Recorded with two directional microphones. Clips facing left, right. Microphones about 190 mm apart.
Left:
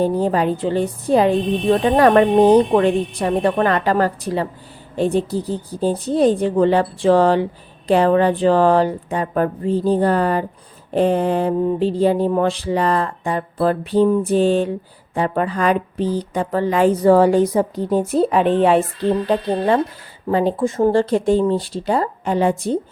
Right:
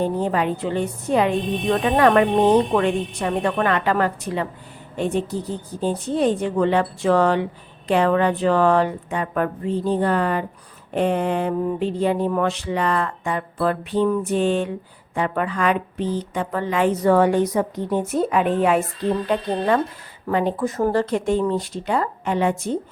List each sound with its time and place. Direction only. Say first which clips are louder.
0.0 s speech: left 4 dB; 35° left (ahead or behind)